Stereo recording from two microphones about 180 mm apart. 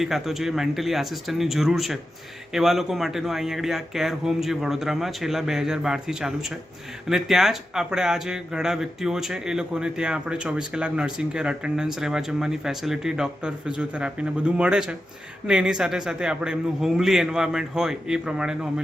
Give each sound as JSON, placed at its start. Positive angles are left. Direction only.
{"t": 0.0, "sound": "speech", "side_deg": 0}